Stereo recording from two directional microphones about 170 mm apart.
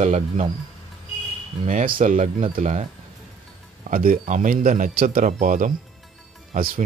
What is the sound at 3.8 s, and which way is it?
Speech, 50° right (ahead or behind).